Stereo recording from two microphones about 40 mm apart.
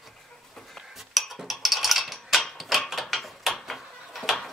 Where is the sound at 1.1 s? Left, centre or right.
Centre.